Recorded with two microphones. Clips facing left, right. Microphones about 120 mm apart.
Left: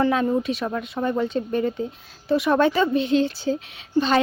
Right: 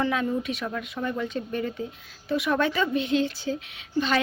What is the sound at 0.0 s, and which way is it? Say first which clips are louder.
A woman's voice: left 5 dB; 35° left (ahead or behind).